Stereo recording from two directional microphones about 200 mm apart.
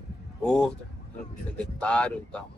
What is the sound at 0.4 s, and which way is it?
Speech, 5° left (ahead or behind).